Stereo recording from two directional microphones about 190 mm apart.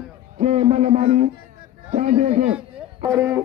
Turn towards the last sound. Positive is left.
turn(degrees=-15)  # may be behind; listen again after turning